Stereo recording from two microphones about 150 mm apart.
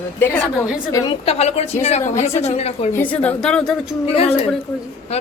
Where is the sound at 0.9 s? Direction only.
30° left (ahead or behind).